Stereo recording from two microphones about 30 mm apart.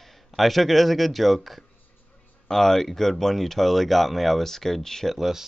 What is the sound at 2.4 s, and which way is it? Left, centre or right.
Speech, centre.